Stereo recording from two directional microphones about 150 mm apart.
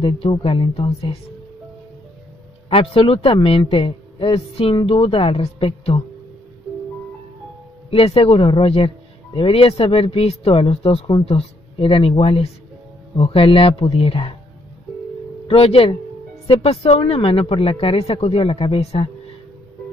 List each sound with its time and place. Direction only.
0.0 s speech: 35° left (ahead or behind)
2.7 s speech: 40° left (ahead or behind)
7.9 s speech: 40° left (ahead or behind)
15.4 s speech: 40° left (ahead or behind)